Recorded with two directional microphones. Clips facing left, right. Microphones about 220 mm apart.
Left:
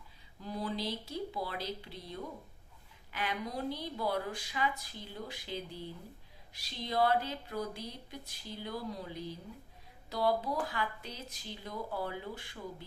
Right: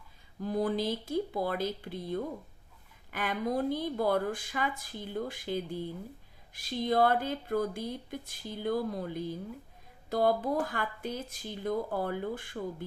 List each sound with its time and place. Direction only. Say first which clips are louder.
0.3 s speech: right 8 dB; 50° right (ahead or behind)